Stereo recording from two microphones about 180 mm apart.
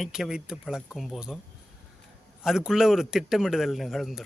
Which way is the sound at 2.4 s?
5° right (ahead or behind).